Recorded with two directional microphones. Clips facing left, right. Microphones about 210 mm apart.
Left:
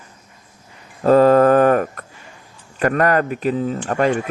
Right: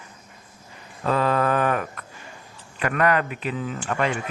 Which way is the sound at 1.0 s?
40° left (ahead or behind).